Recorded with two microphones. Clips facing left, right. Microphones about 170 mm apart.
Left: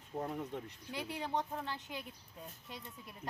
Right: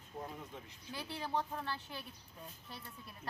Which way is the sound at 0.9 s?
15° left (ahead or behind).